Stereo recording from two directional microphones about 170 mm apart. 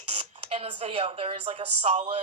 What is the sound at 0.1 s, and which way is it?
A woman's voice, 35° right (ahead or behind).